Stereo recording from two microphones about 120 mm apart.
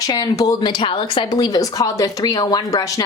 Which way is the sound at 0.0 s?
30° left (ahead or behind).